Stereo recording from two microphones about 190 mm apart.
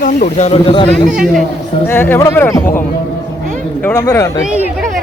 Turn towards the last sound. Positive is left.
turn(degrees=15)  # may be behind; listen again after turning